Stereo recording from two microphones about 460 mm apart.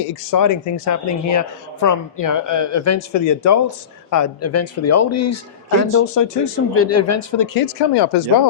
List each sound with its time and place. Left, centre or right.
0.3 s speech: left